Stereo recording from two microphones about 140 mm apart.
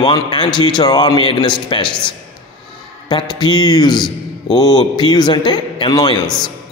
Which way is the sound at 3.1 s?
30° left (ahead or behind).